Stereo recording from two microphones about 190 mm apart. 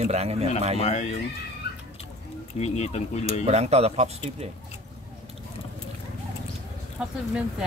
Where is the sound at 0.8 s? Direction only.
35° left (ahead or behind).